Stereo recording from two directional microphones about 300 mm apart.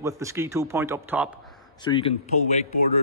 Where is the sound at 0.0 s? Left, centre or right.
Centre.